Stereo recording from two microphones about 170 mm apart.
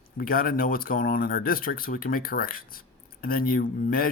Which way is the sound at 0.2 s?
60° left (ahead or behind).